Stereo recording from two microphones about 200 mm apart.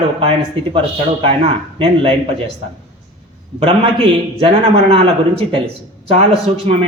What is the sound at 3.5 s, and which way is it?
A man's voice, 25° right (ahead or behind).